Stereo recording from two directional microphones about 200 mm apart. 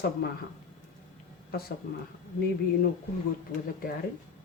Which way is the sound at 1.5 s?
50° left (ahead or behind).